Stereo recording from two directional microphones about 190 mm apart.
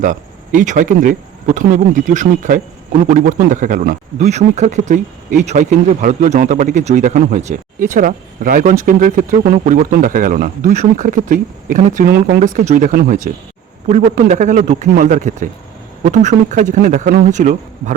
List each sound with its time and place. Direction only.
0.0 s speech: 45° right (ahead or behind)